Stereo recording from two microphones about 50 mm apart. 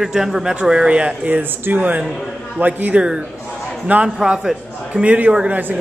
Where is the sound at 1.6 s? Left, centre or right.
Right.